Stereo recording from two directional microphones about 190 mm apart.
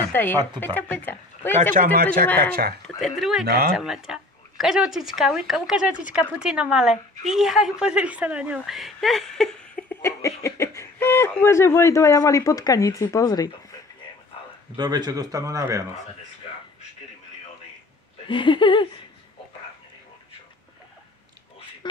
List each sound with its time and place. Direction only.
0.1 s speech: 10° left (ahead or behind)
1.6 s speech: 45° right (ahead or behind)
3.2 s speech: centre (ahead or behind)
3.4 s speech: 55° right (ahead or behind)
3.7 s speech: centre (ahead or behind); by 13.6 s 20° left (ahead or behind)
14.8 s speech: 20° right (ahead or behind)
18.3 s a sound: 25° left (ahead or behind)